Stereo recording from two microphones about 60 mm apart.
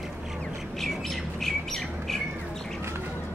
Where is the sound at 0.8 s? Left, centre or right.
Centre.